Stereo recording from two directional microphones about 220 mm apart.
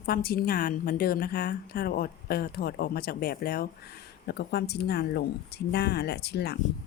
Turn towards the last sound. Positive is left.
turn(degrees=50)  # may be behind; listen again after turning